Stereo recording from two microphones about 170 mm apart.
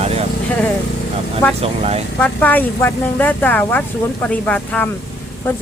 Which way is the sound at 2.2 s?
10° left (ahead or behind).